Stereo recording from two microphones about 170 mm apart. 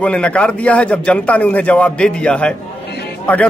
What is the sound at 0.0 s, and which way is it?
Speech, 5° left (ahead or behind).